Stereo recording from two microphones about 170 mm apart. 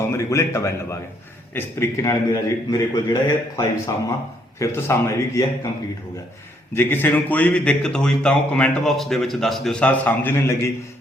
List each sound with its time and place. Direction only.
0.1 s a man's voice: 15° left (ahead or behind)
6.7 s a man's voice: 10° left (ahead or behind)